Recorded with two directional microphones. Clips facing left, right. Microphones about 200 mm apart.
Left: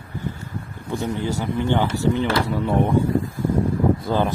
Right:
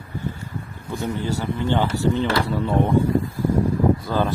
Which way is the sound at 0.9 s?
15° left (ahead or behind).